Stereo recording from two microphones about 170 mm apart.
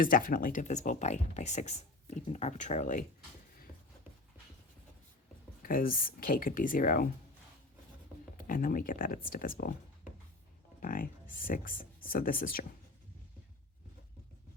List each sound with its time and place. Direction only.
0.0 s speech: 55° left (ahead or behind)
5.6 s speech: 55° left (ahead or behind)
8.4 s speech: 55° left (ahead or behind)
10.8 s speech: 55° left (ahead or behind)